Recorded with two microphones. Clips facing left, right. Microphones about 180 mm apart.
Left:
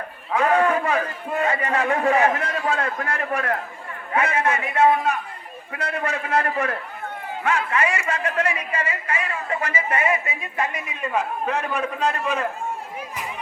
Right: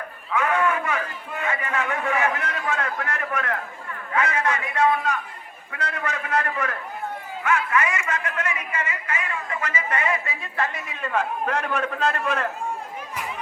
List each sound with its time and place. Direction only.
0.3 s a man's voice: 35° left (ahead or behind); by 12.5 s 10° left (ahead or behind)